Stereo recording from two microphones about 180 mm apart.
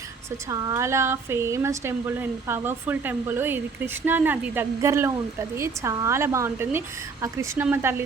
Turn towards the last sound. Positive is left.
turn(degrees=-10)  # may be behind; listen again after turning